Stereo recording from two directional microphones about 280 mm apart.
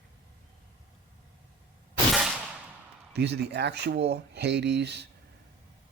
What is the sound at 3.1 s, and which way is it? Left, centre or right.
Speech, right.